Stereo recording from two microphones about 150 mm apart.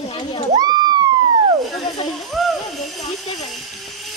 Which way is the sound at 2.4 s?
Centre (ahead or behind).